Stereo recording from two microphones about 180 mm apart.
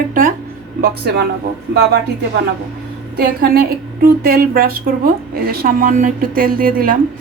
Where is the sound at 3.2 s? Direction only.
55° right (ahead or behind).